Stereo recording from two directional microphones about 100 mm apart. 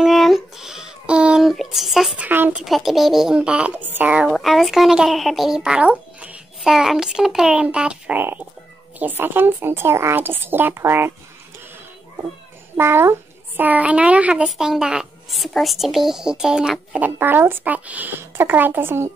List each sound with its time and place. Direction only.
0.0 s a sound: centre (ahead or behind)
2.1 s a child's voice: 20° right (ahead or behind)
2.6 s a child's voice: centre (ahead or behind)
4.3 s a child's voice: centre (ahead or behind)
8.2 s speech: 20° right (ahead or behind)
12.7 s a child's voice: 25° right (ahead or behind); by 17.1 s 5° right (ahead or behind)
17.2 s speech: 20° right (ahead or behind)